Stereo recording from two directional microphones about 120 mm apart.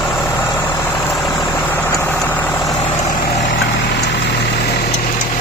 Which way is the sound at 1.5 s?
15° left (ahead or behind).